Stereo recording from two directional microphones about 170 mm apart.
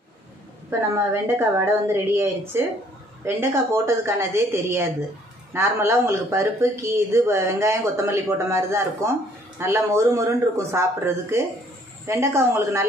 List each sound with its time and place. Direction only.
0.7 s speech: 15° right (ahead or behind)